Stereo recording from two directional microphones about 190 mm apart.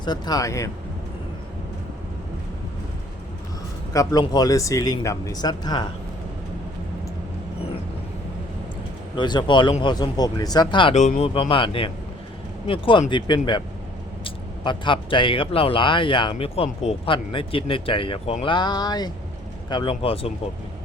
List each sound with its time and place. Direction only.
0.0 s speech: 20° left (ahead or behind)
3.9 s speech: 20° left (ahead or behind)
9.1 s speech: 25° left (ahead or behind)
10.9 s speech: 40° left (ahead or behind)